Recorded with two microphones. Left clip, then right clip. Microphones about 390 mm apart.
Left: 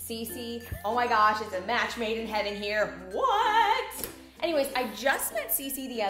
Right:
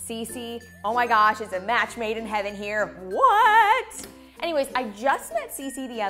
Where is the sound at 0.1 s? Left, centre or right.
Right.